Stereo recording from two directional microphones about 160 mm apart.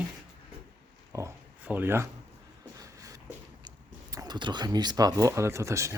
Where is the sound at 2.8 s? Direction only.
20° right (ahead or behind).